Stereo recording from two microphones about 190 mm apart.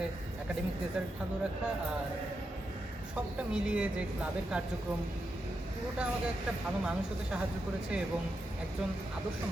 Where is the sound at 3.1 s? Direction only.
5° right (ahead or behind).